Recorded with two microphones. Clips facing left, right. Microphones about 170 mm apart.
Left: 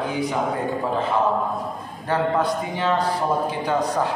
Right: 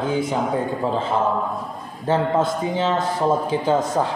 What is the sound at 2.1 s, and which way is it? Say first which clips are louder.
Speech: right 2 dB; 25° right (ahead or behind).